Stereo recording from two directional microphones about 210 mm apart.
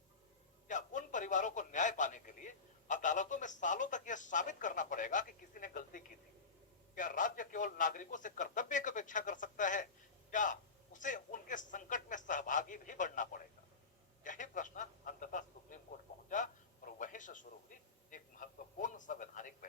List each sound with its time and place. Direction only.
0.7 s a man's voice: 35° left (ahead or behind)
16.3 s a sound: 35° left (ahead or behind)
18.1 s a man's voice: 40° left (ahead or behind)